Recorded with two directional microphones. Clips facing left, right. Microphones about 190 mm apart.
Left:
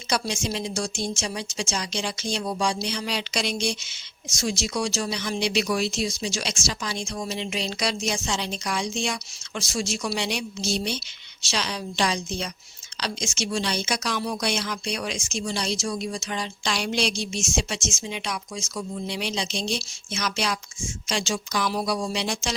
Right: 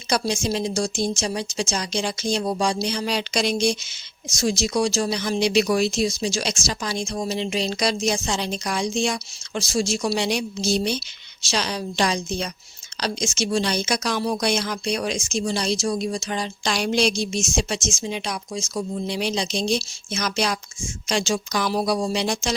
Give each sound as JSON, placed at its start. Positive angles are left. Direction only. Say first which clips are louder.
{"t": 0.1, "sound": "speech", "louder": "right 4 dB", "side_deg": -40}